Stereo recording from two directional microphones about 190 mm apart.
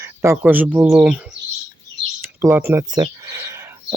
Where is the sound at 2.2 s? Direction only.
15° right (ahead or behind).